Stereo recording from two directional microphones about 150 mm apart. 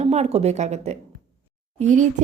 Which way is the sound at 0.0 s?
45° right (ahead or behind).